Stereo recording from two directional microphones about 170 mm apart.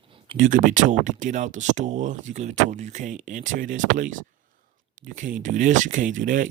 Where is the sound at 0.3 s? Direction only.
50° right (ahead or behind).